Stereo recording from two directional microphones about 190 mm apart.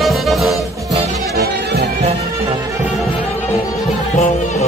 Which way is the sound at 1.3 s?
55° right (ahead or behind).